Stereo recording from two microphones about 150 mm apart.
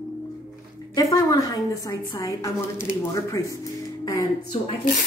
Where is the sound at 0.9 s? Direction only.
25° left (ahead or behind).